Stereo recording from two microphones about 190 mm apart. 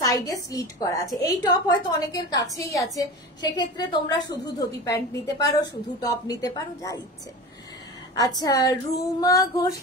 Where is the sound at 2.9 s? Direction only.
20° left (ahead or behind).